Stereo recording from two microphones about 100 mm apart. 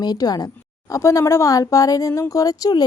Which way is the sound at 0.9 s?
30° left (ahead or behind).